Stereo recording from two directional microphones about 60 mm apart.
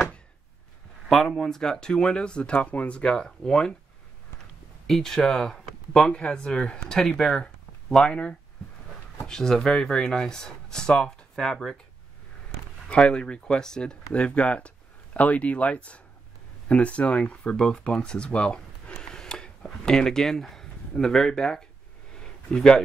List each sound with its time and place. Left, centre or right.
1.0 s speech: centre; by 3.0 s left
3.0 s speech: centre
4.8 s speech: centre
12.8 s speech: centre
22.2 s a sound: centre